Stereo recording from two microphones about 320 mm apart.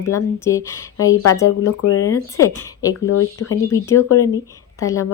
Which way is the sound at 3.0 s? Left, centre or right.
Left.